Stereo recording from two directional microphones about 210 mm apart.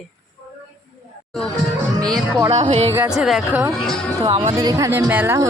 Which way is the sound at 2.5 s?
30° right (ahead or behind).